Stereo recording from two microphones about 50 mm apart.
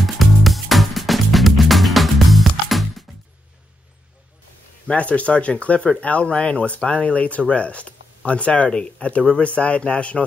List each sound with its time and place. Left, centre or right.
0.0 s music: centre
4.8 s speech: left